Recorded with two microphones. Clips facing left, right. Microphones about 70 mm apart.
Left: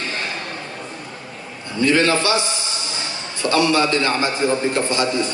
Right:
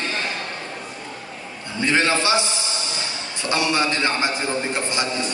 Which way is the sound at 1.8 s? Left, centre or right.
Right.